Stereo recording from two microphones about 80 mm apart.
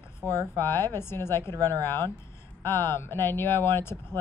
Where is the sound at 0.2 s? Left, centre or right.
Left.